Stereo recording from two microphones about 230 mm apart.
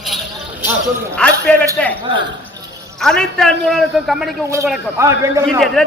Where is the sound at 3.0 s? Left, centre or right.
Centre.